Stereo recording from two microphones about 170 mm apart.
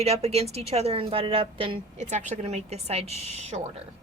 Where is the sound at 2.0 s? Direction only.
45° right (ahead or behind).